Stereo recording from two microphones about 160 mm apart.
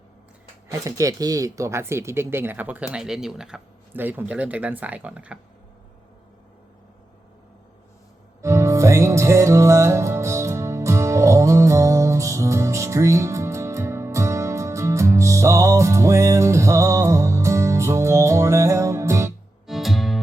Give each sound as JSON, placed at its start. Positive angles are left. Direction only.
{"t": 0.7, "sound": "speech", "side_deg": -20}
{"t": 8.4, "sound": "music", "side_deg": -20}
{"t": 19.6, "sound": "music", "side_deg": 0}